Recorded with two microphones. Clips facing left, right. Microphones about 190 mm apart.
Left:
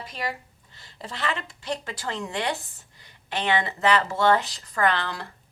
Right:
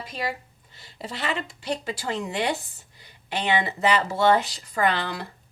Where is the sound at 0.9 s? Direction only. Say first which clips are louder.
Right 1 dB; 10° right (ahead or behind).